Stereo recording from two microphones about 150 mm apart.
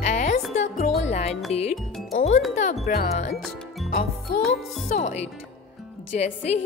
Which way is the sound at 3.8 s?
65° left (ahead or behind).